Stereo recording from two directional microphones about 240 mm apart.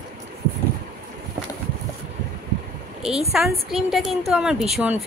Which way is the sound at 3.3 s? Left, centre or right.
Centre.